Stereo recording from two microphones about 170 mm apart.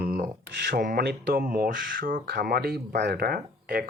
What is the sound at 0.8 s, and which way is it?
Speech, 65° right (ahead or behind).